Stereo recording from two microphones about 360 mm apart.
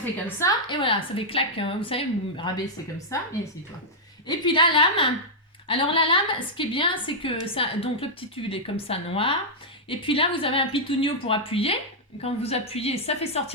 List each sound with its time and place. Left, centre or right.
0.0 s a woman's voice: centre
4.3 s a woman's voice: centre